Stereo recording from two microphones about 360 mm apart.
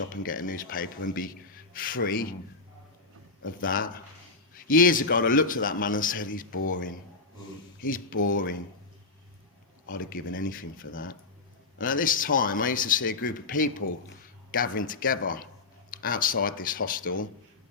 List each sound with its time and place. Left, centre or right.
0.2 s speech: left
3.4 s speech: left
9.9 s speech: left